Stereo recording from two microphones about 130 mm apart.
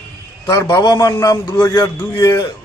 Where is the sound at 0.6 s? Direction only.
35° left (ahead or behind).